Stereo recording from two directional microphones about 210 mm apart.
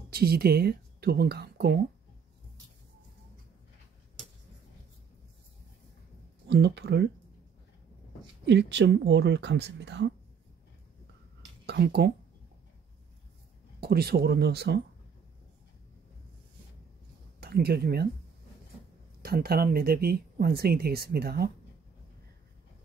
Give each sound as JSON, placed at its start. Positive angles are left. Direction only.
{"t": 0.1, "sound": "speech", "side_deg": -45}
{"t": 6.4, "sound": "speech", "side_deg": -55}
{"t": 8.5, "sound": "speech", "side_deg": -55}
{"t": 11.6, "sound": "speech", "side_deg": -50}
{"t": 13.7, "sound": "speech", "side_deg": -50}
{"t": 17.4, "sound": "speech", "side_deg": -50}
{"t": 19.2, "sound": "speech", "side_deg": -45}